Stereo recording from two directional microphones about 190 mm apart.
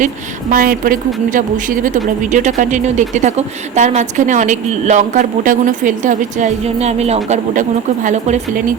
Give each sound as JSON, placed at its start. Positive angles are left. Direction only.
{"t": 0.5, "sound": "a woman's voice", "side_deg": -50}